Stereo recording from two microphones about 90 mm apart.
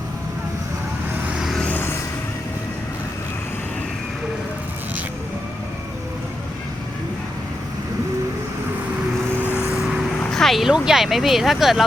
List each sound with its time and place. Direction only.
1.6 s vehicle: 25° left (ahead or behind)
9.4 s vehicle: 25° left (ahead or behind)
10.2 s speech: 5° left (ahead or behind)